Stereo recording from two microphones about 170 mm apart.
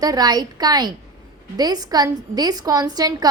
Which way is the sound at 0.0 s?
20° right (ahead or behind).